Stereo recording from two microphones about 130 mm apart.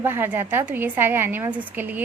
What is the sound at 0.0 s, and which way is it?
A woman's voice, 15° right (ahead or behind).